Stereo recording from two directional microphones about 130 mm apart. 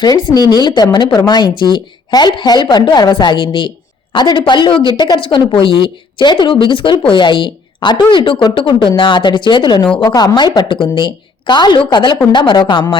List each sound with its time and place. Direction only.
0.0 s a woman's voice: 30° left (ahead or behind)